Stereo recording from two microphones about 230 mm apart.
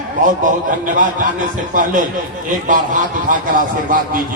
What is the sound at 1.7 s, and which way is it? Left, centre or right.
Speech, right.